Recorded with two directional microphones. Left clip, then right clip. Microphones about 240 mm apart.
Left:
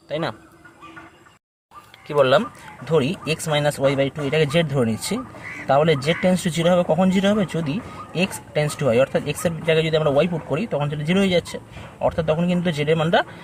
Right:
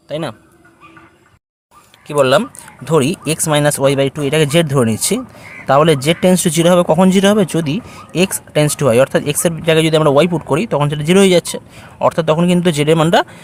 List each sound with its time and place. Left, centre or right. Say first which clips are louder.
0.1 s speech: right 3 dB; right
2.0 s speech: right 5 dB; right